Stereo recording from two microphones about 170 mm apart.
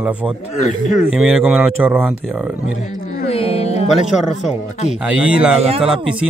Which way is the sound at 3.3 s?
35° left (ahead or behind).